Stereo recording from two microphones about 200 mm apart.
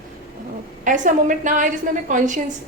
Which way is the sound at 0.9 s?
40° right (ahead or behind).